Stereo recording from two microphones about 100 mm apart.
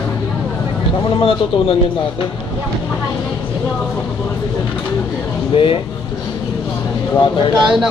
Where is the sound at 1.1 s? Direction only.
65° left (ahead or behind).